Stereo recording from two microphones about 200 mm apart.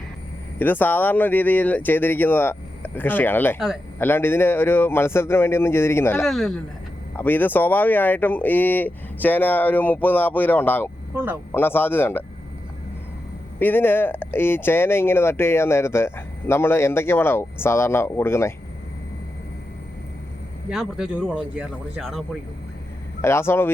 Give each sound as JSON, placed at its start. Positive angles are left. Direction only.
{"t": 0.6, "sound": "speech", "side_deg": 10}
{"t": 6.2, "sound": "speech", "side_deg": 0}
{"t": 11.1, "sound": "speech", "side_deg": -10}
{"t": 11.5, "sound": "speech", "side_deg": 10}
{"t": 13.6, "sound": "speech", "side_deg": 10}
{"t": 20.7, "sound": "speech", "side_deg": -5}
{"t": 23.2, "sound": "speech", "side_deg": 10}